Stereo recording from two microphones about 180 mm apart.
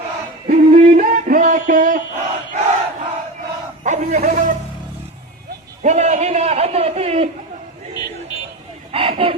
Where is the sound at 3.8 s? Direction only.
40° right (ahead or behind).